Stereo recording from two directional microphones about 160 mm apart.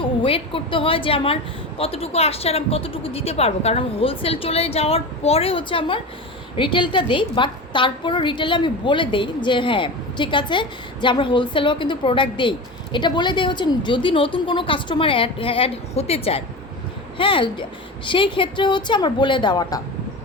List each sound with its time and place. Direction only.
0.0 s a woman's voice: 35° left (ahead or behind)